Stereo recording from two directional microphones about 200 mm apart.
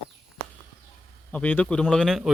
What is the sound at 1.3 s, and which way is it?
A man's voice, 10° left (ahead or behind).